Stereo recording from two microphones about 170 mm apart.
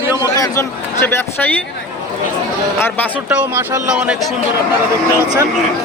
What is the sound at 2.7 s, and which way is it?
Speech, 15° left (ahead or behind).